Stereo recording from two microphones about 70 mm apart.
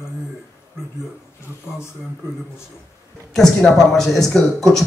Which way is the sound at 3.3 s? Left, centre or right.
Centre.